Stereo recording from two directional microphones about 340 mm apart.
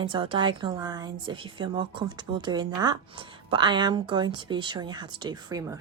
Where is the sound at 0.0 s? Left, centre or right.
Centre.